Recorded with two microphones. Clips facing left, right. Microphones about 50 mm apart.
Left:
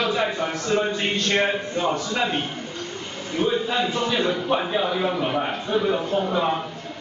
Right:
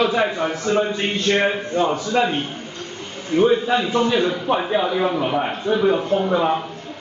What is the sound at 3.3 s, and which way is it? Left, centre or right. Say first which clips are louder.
Speech: right 7 dB; right.